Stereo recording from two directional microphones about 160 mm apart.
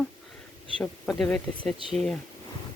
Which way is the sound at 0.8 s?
5° left (ahead or behind).